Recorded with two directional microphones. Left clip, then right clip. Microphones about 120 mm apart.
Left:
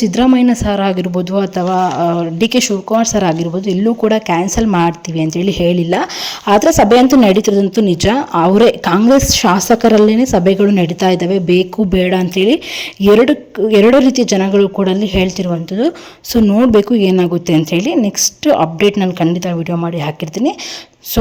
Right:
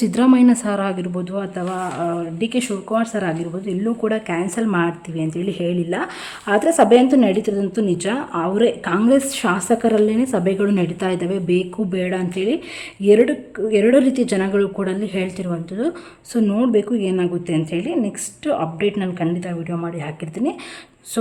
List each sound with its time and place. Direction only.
0.0 s speech: 20° left (ahead or behind); by 2.6 s 60° left (ahead or behind)
2.6 s speech: 40° left (ahead or behind); by 9.0 s 60° left (ahead or behind)
9.0 s a woman's voice: 40° left (ahead or behind); by 14.0 s 60° left (ahead or behind)
14.0 s speech: 40° left (ahead or behind)
16.7 s a woman's voice: 65° left (ahead or behind)